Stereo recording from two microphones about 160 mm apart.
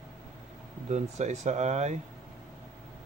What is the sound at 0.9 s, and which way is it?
Speech, 45° right (ahead or behind).